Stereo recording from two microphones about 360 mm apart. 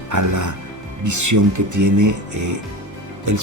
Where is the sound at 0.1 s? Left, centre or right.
Right.